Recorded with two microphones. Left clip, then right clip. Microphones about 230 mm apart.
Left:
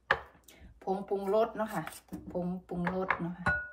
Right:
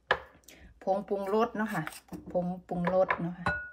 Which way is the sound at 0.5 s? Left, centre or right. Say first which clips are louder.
Right 5 dB; right.